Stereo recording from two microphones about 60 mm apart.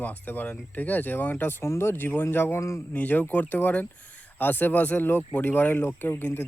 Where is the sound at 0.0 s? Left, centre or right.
Left.